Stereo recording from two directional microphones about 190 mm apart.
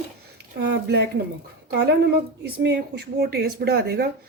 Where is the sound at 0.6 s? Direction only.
60° right (ahead or behind).